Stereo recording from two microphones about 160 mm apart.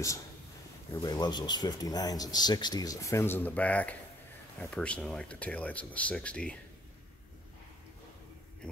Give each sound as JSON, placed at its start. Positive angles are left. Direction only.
{"t": 0.9, "sound": "speech", "side_deg": 25}